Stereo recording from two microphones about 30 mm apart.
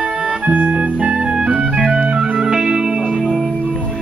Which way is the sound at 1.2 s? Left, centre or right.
Right.